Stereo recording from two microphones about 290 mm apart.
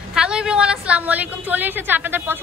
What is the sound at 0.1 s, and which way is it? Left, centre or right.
A woman's voice, centre.